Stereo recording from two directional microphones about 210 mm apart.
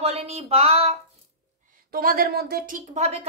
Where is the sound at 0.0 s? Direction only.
30° right (ahead or behind).